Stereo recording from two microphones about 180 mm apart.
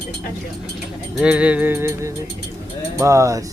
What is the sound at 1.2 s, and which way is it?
Music, 5° right (ahead or behind).